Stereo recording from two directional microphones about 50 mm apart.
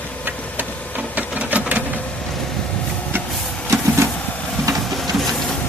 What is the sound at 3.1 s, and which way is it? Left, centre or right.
Printer, right.